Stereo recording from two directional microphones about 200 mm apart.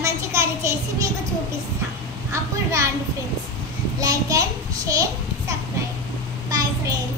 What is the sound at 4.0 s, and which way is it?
A child's voice, 15° right (ahead or behind).